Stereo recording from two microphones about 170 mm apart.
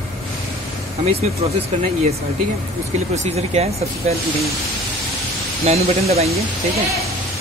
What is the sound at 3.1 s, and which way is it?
Speech, 40° right (ahead or behind).